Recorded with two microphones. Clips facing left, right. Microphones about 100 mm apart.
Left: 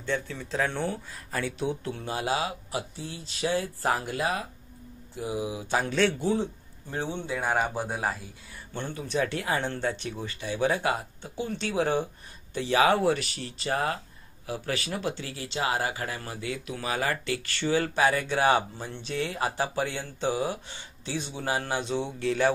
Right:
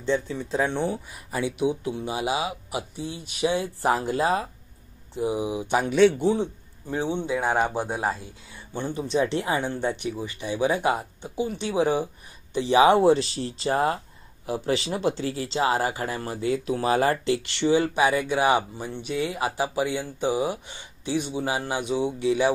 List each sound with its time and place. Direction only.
0.0 s speech: 20° right (ahead or behind)